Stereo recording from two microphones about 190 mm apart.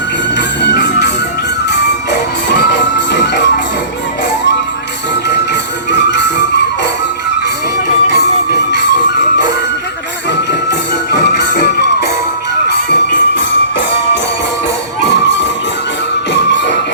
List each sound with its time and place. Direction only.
0.3 s music: 65° left (ahead or behind)
5.9 s music: 65° left (ahead or behind)
8.1 s music: 60° left (ahead or behind)
10.7 s music: 65° left (ahead or behind)
16.3 s music: 70° left (ahead or behind)